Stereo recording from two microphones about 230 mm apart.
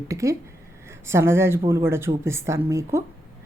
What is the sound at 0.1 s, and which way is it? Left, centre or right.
Speech, centre.